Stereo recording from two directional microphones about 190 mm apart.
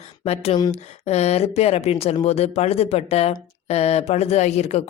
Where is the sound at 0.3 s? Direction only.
35° left (ahead or behind).